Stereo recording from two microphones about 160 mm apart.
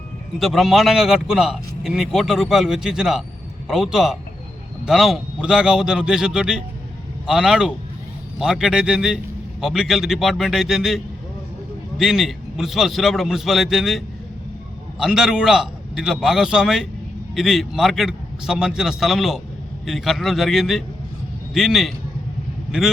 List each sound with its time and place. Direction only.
0.3 s speech: centre (ahead or behind)